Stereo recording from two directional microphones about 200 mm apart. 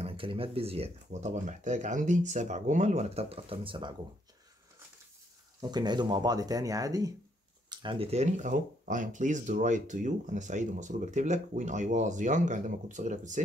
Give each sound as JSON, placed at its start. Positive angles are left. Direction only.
{"t": 0.0, "sound": "speech", "side_deg": -25}
{"t": 5.6, "sound": "speech", "side_deg": -20}